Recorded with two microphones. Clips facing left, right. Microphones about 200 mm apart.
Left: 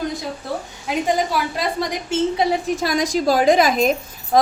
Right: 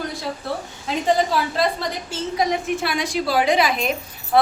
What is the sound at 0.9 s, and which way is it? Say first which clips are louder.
A woman's voice: even; 10° left (ahead or behind).